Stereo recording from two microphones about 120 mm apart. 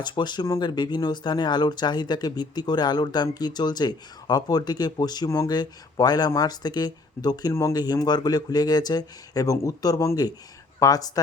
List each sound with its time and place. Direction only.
0.0 s speech: 40° left (ahead or behind)